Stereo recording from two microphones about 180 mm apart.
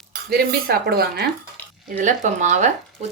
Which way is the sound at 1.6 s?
10° left (ahead or behind).